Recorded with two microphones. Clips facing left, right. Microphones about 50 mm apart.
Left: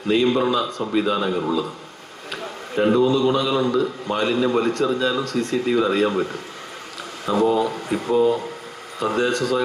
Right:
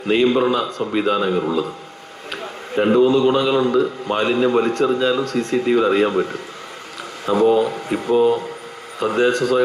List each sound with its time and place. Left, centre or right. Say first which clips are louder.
0.1 s a man's voice: right 2 dB; right
2.3 s a sound: right 3 dB; right
3.2 s a man's voice: right 3 dB; right
7.3 s a man's voice: right 4 dB; right